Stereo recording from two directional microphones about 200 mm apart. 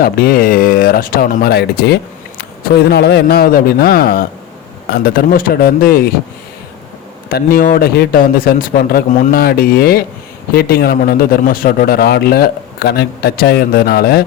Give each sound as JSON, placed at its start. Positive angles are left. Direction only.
{"t": 0.0, "sound": "a man's voice", "side_deg": 50}
{"t": 7.3, "sound": "a man's voice", "side_deg": 45}